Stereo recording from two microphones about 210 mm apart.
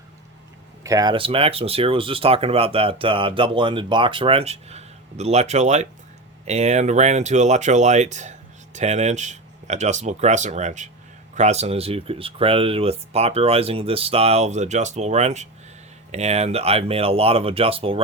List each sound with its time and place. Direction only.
0.9 s speech: 20° right (ahead or behind)